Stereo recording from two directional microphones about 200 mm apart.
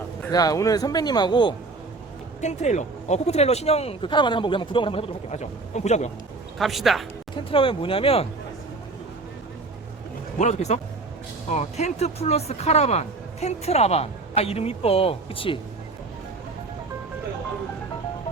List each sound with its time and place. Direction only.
0.3 s speech: 20° left (ahead or behind)
2.4 s speech: 35° left (ahead or behind)
6.6 s speech: centre (ahead or behind)
7.5 s speech: 25° left (ahead or behind)
10.3 s speech: 35° left (ahead or behind)